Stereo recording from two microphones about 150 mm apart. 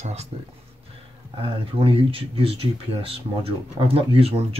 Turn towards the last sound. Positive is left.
turn(degrees=-40)  # may be behind; listen again after turning